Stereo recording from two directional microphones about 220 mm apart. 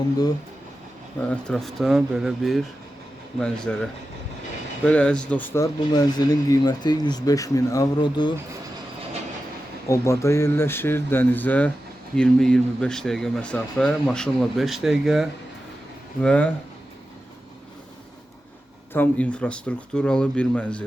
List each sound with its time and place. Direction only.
1.2 s speech: 5° left (ahead or behind)
4.9 s speech: 5° left (ahead or behind)
5.9 s speech: 20° left (ahead or behind)
9.9 s speech: 15° left (ahead or behind)
18.9 s speech: 5° left (ahead or behind)